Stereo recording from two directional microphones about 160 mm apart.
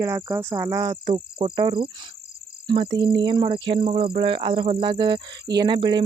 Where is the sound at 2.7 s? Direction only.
30° right (ahead or behind).